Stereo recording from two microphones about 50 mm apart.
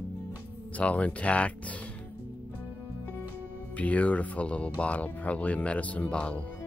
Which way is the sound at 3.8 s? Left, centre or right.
Left.